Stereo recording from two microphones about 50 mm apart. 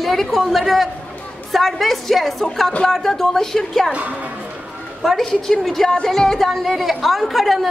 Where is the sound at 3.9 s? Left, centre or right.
Right.